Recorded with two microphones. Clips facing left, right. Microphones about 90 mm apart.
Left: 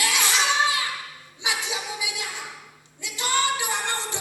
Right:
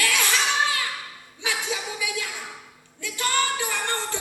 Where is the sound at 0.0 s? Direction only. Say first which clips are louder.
Even; 20° left (ahead or behind).